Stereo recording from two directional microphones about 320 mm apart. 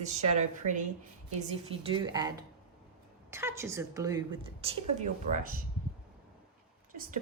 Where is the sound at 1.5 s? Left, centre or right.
Centre.